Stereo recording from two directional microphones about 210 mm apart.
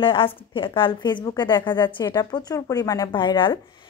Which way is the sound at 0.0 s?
25° left (ahead or behind).